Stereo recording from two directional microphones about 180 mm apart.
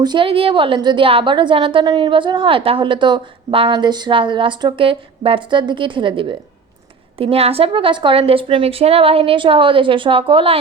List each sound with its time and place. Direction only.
0.0 s a woman's voice: 25° right (ahead or behind)